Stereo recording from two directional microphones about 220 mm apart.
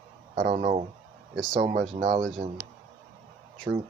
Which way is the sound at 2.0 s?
40° right (ahead or behind).